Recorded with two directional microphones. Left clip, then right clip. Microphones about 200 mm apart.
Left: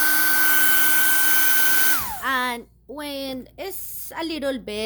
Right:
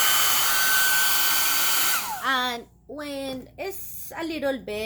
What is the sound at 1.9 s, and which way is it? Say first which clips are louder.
Speech: left 1 dB; 25° left (ahead or behind).